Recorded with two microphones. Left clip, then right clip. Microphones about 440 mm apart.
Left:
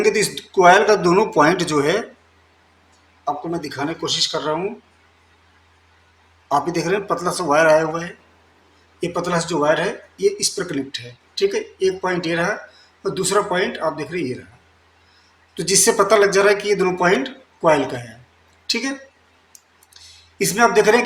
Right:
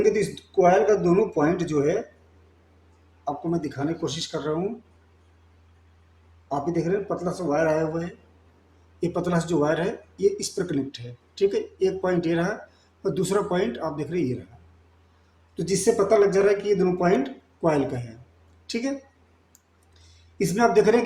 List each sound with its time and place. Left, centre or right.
0.0 s speech: right
3.2 s speech: right
6.5 s speech: right
15.5 s speech: right
20.4 s speech: right